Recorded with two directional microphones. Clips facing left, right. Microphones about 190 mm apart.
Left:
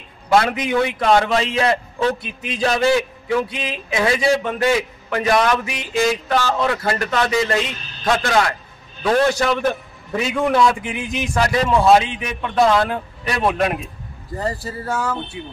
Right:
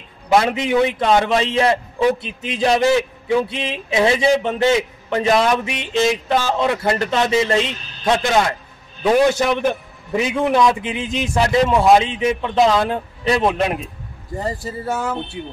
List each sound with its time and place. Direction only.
0.3 s speech: 20° right (ahead or behind)